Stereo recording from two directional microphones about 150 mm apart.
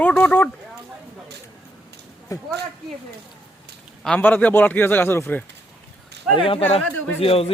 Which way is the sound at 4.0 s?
10° left (ahead or behind).